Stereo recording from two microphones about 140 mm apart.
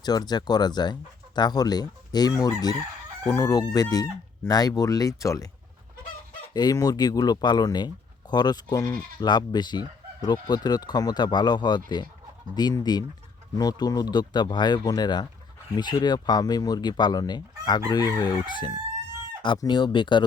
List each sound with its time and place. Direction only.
0.0 s speech: 30° left (ahead or behind)
6.5 s speech: 30° left (ahead or behind)